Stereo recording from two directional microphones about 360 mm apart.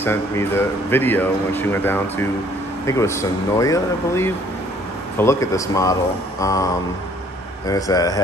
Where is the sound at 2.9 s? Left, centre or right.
Centre.